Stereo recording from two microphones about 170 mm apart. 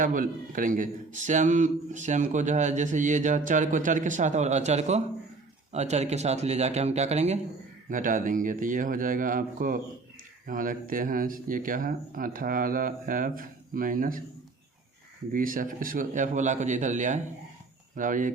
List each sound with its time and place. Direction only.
0.0 s a man's voice: 50° right (ahead or behind)
15.3 s a man's voice: 55° right (ahead or behind)